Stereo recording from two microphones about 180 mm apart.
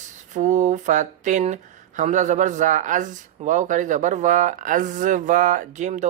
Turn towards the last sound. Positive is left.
turn(degrees=-40)  # may be behind; listen again after turning